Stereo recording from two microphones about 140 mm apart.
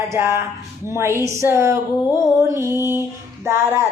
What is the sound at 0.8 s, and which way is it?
Music, 20° right (ahead or behind).